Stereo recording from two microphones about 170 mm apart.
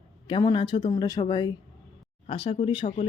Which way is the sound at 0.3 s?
30° left (ahead or behind).